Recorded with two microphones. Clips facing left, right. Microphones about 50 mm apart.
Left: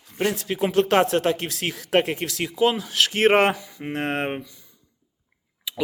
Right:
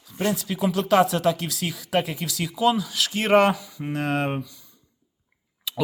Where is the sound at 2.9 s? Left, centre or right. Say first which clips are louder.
Left 2 dB; left.